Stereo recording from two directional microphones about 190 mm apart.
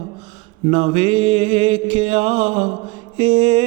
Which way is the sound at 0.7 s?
30° right (ahead or behind).